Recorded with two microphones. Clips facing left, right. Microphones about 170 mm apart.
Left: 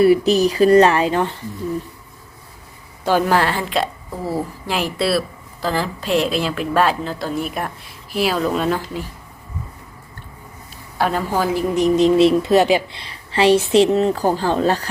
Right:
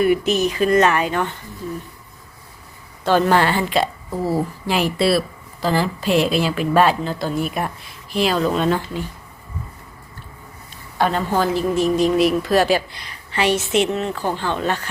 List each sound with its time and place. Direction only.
0.0 s speech: 35° left (ahead or behind)
3.0 s speech: 10° left (ahead or behind)
10.9 s a woman's voice: 5° left (ahead or behind); by 14.8 s 35° left (ahead or behind)